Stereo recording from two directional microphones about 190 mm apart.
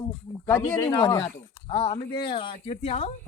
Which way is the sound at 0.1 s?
10° left (ahead or behind).